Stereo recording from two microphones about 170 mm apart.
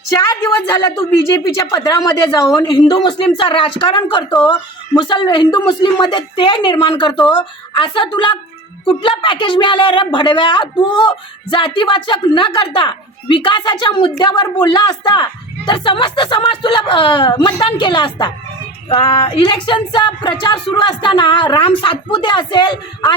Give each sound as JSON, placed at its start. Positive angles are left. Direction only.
{"t": 0.1, "sound": "a woman's voice", "side_deg": 15}